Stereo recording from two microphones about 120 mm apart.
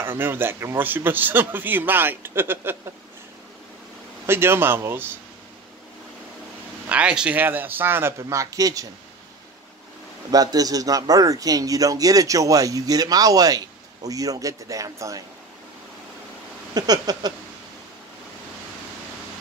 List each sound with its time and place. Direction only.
0.0 s speech: 15° right (ahead or behind)
4.3 s speech: 20° right (ahead or behind)
6.9 s speech: 10° right (ahead or behind); by 8.8 s 30° right (ahead or behind)
10.3 s speech: 30° right (ahead or behind)
16.7 s speech: 35° right (ahead or behind)